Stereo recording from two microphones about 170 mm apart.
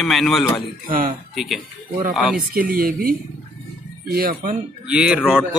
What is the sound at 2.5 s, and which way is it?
Speech, 60° right (ahead or behind).